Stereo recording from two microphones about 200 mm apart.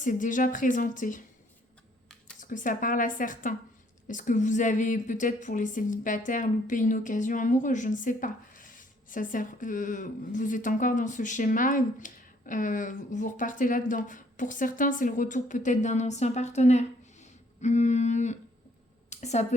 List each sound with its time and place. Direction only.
0.0 s a woman's voice: 40° left (ahead or behind)
2.4 s a woman's voice: 40° left (ahead or behind)